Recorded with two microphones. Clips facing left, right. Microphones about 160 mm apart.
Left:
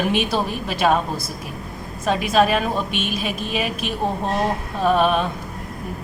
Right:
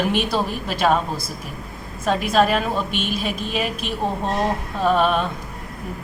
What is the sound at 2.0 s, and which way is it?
A woman's voice, 10° left (ahead or behind).